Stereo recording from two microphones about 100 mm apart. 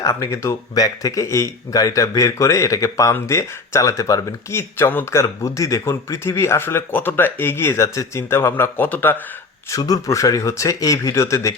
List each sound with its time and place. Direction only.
0.0 s speech: 30° left (ahead or behind)
9.6 s speech: 35° left (ahead or behind)